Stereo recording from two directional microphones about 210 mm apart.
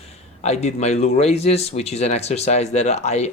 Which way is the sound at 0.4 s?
30° left (ahead or behind).